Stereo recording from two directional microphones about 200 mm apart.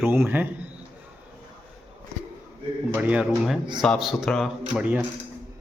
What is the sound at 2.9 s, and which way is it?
A man's voice, 5° right (ahead or behind).